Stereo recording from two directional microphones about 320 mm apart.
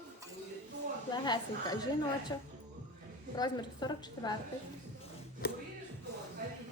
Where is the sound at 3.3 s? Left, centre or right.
Centre.